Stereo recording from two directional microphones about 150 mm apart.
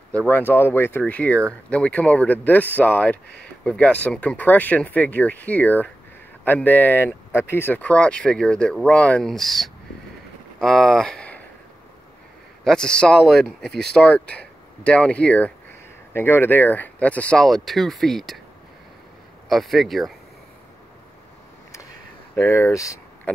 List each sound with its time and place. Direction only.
0.3 s speech: 15° left (ahead or behind)
12.6 s speech: 5° left (ahead or behind)
19.5 s speech: centre (ahead or behind)
22.3 s speech: 20° left (ahead or behind)